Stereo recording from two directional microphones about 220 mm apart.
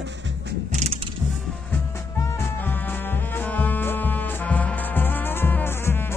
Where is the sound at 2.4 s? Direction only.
10° left (ahead or behind).